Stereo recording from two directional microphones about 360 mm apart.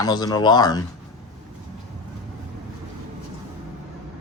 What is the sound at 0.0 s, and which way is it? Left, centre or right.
Speech, centre.